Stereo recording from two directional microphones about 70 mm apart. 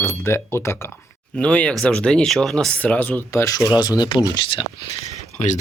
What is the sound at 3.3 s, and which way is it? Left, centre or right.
Speech, left.